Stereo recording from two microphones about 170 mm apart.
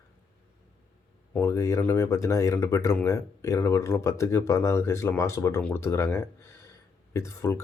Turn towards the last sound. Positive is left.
turn(degrees=15)  # may be behind; listen again after turning